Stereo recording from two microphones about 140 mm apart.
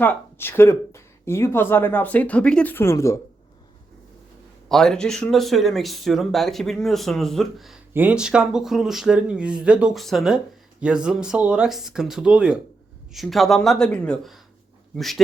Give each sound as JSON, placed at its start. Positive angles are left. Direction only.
{"t": 0.0, "sound": "speech", "side_deg": 15}
{"t": 4.7, "sound": "speech", "side_deg": 5}